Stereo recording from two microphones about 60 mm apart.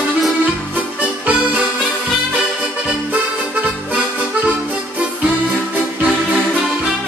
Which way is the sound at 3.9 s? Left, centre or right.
Right.